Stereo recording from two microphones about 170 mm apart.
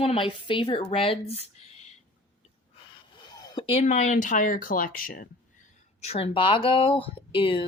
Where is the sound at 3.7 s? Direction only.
40° left (ahead or behind); by 5.2 s 60° left (ahead or behind).